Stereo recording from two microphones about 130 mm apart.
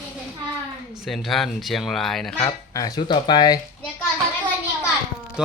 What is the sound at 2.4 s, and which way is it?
Speech, 30° left (ahead or behind).